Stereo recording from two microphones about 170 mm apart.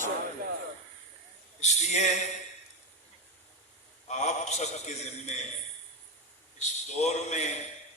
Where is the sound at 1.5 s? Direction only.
40° left (ahead or behind).